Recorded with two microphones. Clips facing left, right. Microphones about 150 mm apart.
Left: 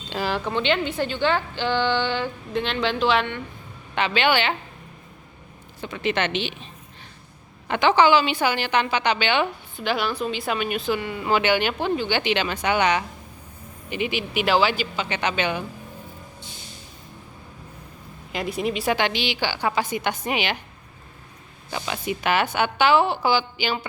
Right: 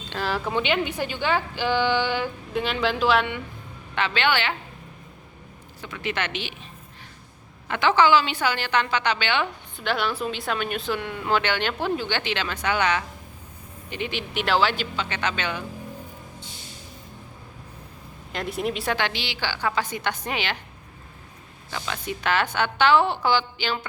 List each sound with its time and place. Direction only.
0.1 s a woman's voice: 5° left (ahead or behind)
3.9 s a woman's voice: 15° left (ahead or behind)
5.8 s a woman's voice: 25° left (ahead or behind)
7.7 s a woman's voice: 20° left (ahead or behind)
9.7 s speech: centre (ahead or behind)
11.8 s speech: centre (ahead or behind)
12.1 s a woman's voice: 15° left (ahead or behind)
18.3 s speech: centre (ahead or behind)
18.9 s a woman's voice: 15° left (ahead or behind)
21.7 s a woman's voice: 15° left (ahead or behind)